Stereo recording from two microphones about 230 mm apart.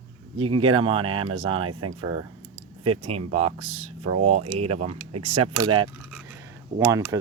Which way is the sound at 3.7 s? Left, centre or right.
Right.